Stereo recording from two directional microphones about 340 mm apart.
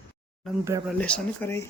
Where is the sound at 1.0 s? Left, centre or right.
Centre.